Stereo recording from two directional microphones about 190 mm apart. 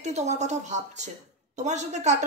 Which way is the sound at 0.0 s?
35° right (ahead or behind).